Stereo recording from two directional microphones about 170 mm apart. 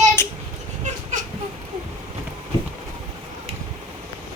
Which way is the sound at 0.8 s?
45° right (ahead or behind).